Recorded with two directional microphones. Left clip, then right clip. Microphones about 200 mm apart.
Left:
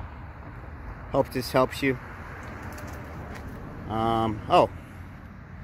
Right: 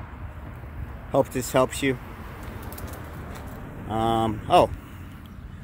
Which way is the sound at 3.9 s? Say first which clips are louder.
Right 2 dB; 5° right (ahead or behind).